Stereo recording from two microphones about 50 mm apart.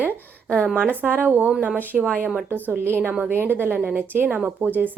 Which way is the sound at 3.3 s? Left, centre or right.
Right.